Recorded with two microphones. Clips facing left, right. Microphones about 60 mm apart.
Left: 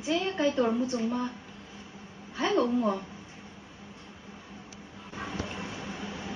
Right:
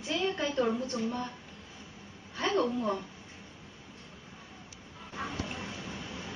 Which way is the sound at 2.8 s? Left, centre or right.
Centre.